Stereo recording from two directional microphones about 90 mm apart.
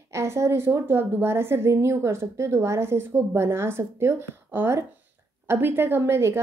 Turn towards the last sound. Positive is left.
turn(degrees=-30)  # may be behind; listen again after turning